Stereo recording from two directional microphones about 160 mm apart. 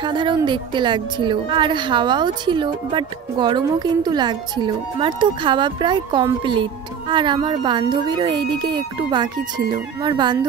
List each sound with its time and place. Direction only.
0.0 s a woman's voice: 30° right (ahead or behind)